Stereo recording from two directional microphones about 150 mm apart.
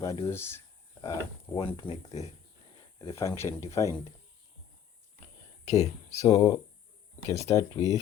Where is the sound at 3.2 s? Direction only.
20° left (ahead or behind).